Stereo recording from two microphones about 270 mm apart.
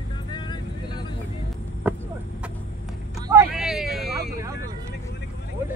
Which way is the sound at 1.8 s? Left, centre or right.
Centre.